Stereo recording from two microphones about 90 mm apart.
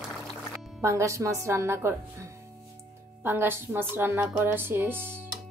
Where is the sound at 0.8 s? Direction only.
35° right (ahead or behind).